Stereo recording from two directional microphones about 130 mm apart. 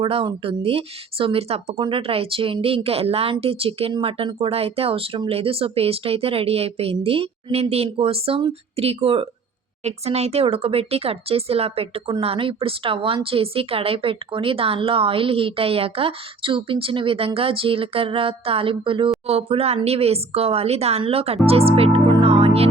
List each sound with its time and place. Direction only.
0.0 s speech: 45° right (ahead or behind)